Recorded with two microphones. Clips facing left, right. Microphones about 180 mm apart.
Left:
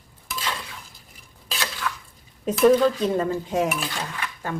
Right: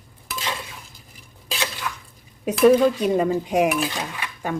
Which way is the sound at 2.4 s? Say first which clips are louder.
Right 2 dB; 10° right (ahead or behind).